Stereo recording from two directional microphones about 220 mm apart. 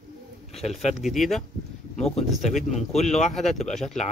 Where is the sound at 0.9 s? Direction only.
Centre (ahead or behind).